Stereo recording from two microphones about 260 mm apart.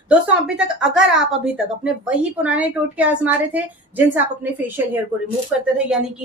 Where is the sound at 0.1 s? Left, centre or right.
Centre.